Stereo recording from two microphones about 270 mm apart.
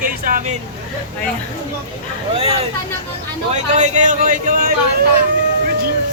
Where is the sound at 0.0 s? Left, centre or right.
Right.